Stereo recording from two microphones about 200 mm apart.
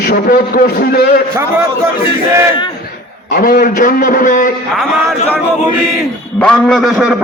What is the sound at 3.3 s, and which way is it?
A man's voice, 50° left (ahead or behind).